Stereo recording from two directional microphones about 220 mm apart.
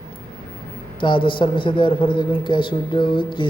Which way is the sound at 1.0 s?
20° left (ahead or behind).